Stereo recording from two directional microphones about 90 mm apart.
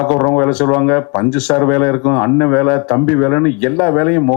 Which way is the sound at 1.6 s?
20° left (ahead or behind).